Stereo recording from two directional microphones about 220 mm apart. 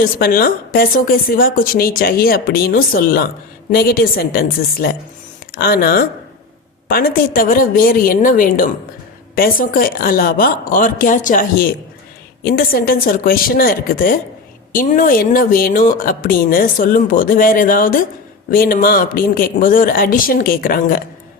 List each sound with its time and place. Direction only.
0.0 s a woman's voice: 40° left (ahead or behind)